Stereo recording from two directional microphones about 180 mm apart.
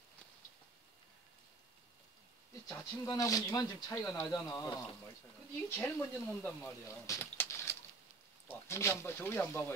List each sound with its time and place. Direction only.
2.7 s speech: 20° left (ahead or behind)
5.8 s speech: 10° left (ahead or behind)